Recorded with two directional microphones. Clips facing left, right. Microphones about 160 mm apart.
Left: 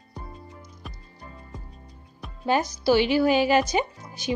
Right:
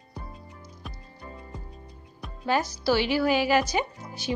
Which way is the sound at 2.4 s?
20° left (ahead or behind).